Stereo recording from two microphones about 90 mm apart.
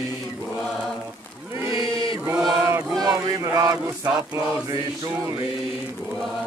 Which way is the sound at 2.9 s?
40° right (ahead or behind).